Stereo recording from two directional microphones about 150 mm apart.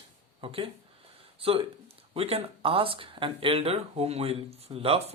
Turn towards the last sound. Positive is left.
turn(degrees=-40)  # may be behind; listen again after turning